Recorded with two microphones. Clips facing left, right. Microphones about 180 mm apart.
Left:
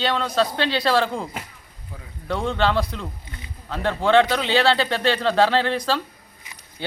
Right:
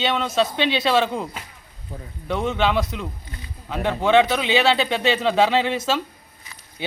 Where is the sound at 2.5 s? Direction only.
20° right (ahead or behind).